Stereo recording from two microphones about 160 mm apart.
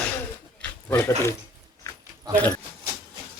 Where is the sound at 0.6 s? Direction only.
15° left (ahead or behind).